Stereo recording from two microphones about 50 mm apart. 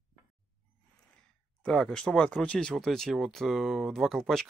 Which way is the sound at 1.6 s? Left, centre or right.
Centre.